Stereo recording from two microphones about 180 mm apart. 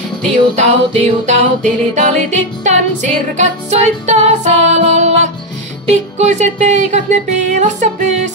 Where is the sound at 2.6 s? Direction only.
40° right (ahead or behind).